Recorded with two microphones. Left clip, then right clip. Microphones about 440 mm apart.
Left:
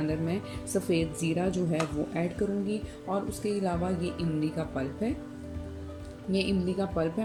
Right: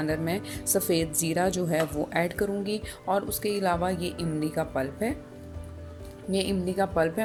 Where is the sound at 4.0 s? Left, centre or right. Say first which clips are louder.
Right 1 dB; centre.